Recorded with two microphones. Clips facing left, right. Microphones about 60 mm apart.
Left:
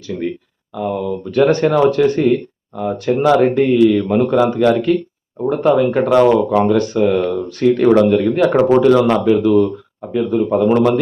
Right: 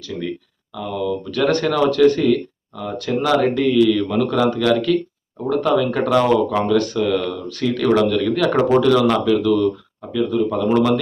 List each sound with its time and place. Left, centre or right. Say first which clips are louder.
0.7 s a man's voice: left 3 dB; left